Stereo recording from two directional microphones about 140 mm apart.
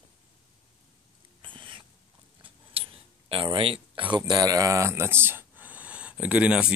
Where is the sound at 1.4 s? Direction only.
35° right (ahead or behind).